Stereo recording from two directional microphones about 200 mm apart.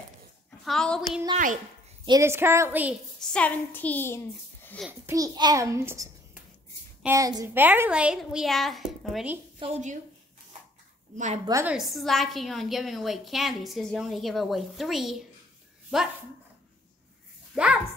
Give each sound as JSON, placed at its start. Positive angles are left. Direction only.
{"t": 0.7, "sound": "a woman's voice", "side_deg": 5}
{"t": 2.0, "sound": "a child's voice", "side_deg": -15}
{"t": 3.2, "sound": "a woman's voice", "side_deg": 5}
{"t": 4.8, "sound": "a child's voice", "side_deg": -15}
{"t": 9.6, "sound": "a woman's voice", "side_deg": -35}
{"t": 11.4, "sound": "a child's voice", "side_deg": -15}
{"t": 11.7, "sound": "a woman's voice", "side_deg": 0}
{"t": 17.5, "sound": "speech", "side_deg": 0}